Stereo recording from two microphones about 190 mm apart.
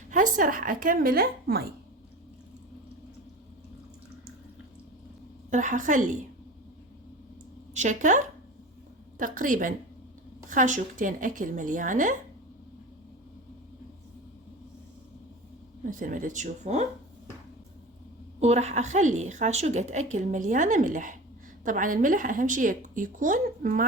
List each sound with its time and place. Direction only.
0.1 s speech: 45° right (ahead or behind)
5.5 s a woman's voice: 40° right (ahead or behind)
7.7 s speech: 40° right (ahead or behind)
15.8 s speech: 45° right (ahead or behind)
18.3 s a woman's voice: 35° right (ahead or behind)